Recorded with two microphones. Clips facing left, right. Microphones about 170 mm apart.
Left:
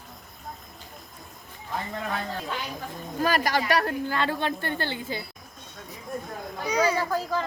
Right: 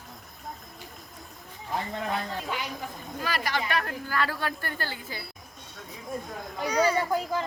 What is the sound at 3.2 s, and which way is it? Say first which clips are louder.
Speech: left 6 dB; 45° left (ahead or behind).